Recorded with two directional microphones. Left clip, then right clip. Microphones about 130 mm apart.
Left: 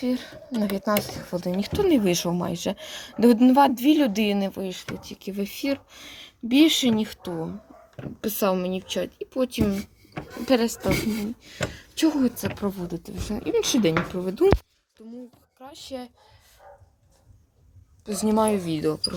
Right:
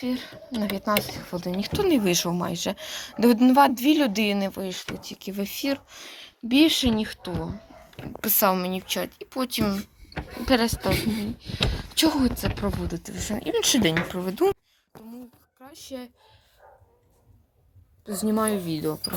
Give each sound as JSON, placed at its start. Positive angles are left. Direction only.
{"t": 0.0, "sound": "speech", "side_deg": 75}
{"t": 1.7, "sound": "a woman's voice", "side_deg": 45}
{"t": 8.2, "sound": "speech", "side_deg": 5}
{"t": 15.6, "sound": "speech", "side_deg": 0}
{"t": 18.0, "sound": "a woman's voice", "side_deg": 25}
{"t": 18.5, "sound": "speech", "side_deg": 0}